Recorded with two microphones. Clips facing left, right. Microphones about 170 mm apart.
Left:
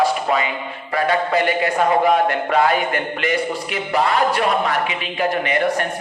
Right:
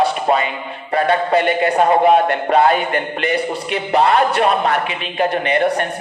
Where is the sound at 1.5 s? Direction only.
30° right (ahead or behind).